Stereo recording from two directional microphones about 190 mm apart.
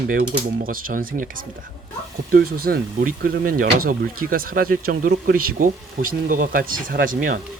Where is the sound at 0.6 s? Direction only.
50° right (ahead or behind).